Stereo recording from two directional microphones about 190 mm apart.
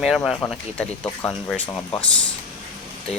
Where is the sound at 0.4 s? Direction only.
10° left (ahead or behind).